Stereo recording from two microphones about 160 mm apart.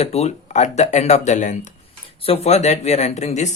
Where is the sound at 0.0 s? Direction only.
40° left (ahead or behind).